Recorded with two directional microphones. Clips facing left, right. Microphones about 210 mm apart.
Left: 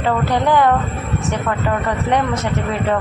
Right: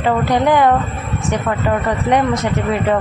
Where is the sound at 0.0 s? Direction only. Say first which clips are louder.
Right 2 dB; 15° right (ahead or behind).